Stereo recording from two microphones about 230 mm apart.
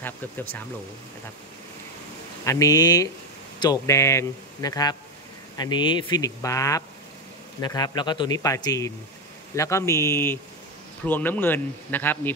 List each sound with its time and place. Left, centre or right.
0.0 s speech: centre
2.4 s speech: centre